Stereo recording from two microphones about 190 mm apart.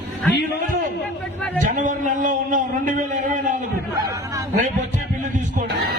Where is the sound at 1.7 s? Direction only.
40° right (ahead or behind).